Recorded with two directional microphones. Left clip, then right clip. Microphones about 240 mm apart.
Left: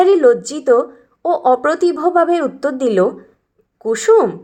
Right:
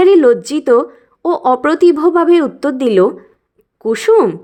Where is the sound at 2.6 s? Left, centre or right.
Right.